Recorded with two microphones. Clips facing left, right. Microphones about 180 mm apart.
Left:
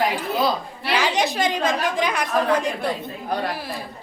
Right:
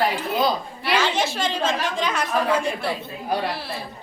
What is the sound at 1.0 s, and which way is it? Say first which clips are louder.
A woman's voice: left 4 dB; 15° left (ahead or behind).